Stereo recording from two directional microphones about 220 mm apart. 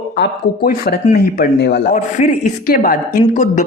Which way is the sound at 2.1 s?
35° left (ahead or behind).